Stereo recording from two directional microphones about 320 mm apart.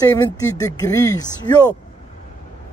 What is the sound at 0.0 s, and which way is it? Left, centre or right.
A man's voice, centre.